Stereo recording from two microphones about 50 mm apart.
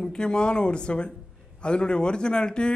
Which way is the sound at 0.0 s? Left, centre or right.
Centre.